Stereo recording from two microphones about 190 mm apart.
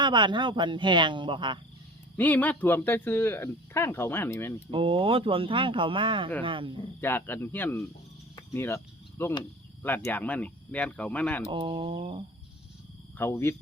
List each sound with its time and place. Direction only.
0.0 s speech: 25° right (ahead or behind)
2.1 s speech: 10° left (ahead or behind)
4.7 s speech: 30° right (ahead or behind)
7.0 s speech: 10° left (ahead or behind)
11.5 s speech: 25° right (ahead or behind)
13.1 s speech: 10° left (ahead or behind)